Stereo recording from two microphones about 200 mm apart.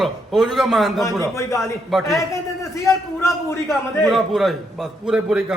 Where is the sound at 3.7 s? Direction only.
Centre (ahead or behind).